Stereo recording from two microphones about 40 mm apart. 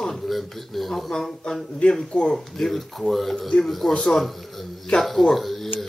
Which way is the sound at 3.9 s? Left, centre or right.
Centre.